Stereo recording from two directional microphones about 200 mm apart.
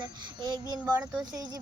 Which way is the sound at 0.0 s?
20° right (ahead or behind).